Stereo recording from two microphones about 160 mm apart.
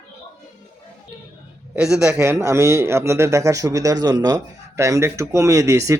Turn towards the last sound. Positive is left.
turn(degrees=-20)  # may be behind; listen again after turning